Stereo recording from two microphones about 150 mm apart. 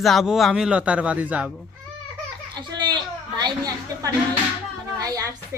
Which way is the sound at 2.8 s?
30° right (ahead or behind).